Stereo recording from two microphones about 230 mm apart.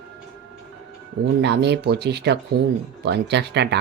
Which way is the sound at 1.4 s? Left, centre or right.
Right.